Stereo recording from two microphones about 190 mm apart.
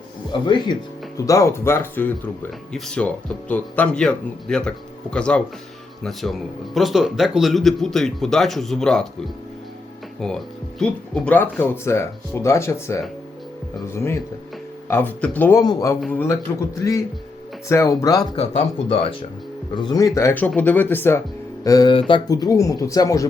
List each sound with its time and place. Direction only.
0.4 s speech: 25° left (ahead or behind); by 9.0 s 5° left (ahead or behind)
10.2 s speech: 5° left (ahead or behind); by 18.3 s 20° left (ahead or behind)
18.3 s speech: 30° left (ahead or behind)